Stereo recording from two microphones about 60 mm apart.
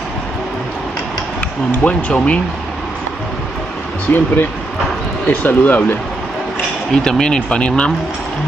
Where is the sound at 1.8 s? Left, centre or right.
Left.